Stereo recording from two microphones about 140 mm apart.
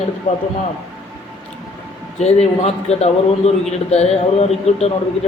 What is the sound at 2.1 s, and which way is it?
A man's voice, 50° left (ahead or behind).